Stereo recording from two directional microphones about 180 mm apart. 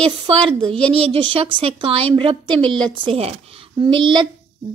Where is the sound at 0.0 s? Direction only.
30° right (ahead or behind).